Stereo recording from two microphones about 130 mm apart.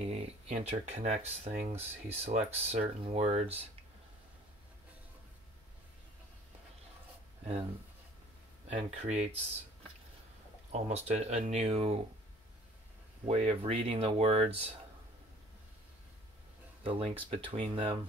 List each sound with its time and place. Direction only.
0.1 s speech: 60° right (ahead or behind)
8.7 s speech: 55° right (ahead or behind)
10.7 s speech: 55° right (ahead or behind)
13.3 s speech: 45° right (ahead or behind)
16.8 s speech: 45° right (ahead or behind)